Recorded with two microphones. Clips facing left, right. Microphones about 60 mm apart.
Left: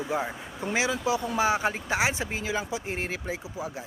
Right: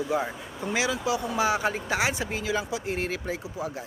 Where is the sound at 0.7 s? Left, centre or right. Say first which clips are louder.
Even; left.